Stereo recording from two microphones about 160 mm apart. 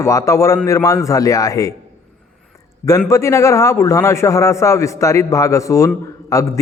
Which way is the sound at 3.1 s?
20° left (ahead or behind).